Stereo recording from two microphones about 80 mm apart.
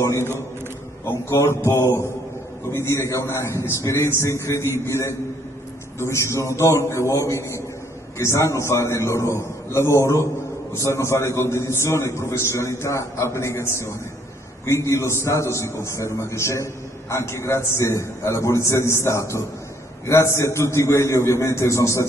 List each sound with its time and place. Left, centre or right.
0.0 s a man's voice: left